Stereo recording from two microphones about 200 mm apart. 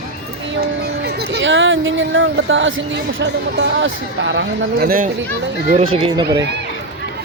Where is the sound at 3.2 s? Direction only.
60° right (ahead or behind).